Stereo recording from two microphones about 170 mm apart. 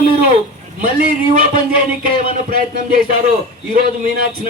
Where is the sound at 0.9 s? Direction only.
60° right (ahead or behind).